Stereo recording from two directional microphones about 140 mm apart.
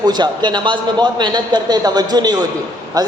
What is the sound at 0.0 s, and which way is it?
A man's voice, 30° right (ahead or behind).